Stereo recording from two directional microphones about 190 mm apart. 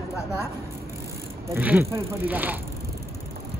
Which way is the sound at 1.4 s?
10° right (ahead or behind).